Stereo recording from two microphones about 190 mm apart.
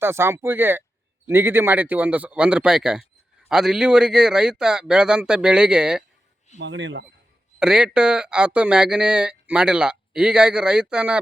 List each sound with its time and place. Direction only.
0.0 s a man's voice: 15° right (ahead or behind)
6.6 s speech: 70° right (ahead or behind)
7.6 s speech: 5° right (ahead or behind)